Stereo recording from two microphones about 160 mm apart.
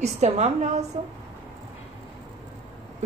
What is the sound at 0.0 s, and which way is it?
Speech, 45° right (ahead or behind).